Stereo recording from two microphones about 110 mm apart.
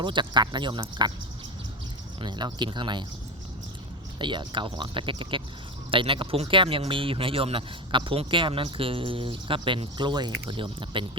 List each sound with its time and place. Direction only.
0.0 s speech: 45° right (ahead or behind)
2.2 s speech: 45° right (ahead or behind)
4.2 s speech: 45° right (ahead or behind)